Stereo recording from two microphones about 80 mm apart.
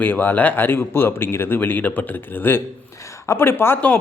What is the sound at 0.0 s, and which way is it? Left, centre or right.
A man's voice, left.